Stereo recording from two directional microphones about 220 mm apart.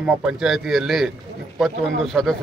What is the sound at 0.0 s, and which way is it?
A man's voice, 5° right (ahead or behind).